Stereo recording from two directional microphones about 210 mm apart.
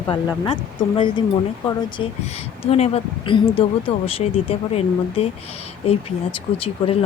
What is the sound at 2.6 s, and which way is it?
Speech, 30° left (ahead or behind).